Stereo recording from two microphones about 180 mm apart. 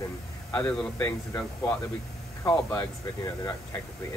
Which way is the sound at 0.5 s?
5° left (ahead or behind).